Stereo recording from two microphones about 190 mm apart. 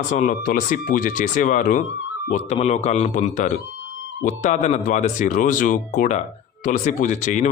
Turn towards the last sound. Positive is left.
turn(degrees=40)  # may be behind; listen again after turning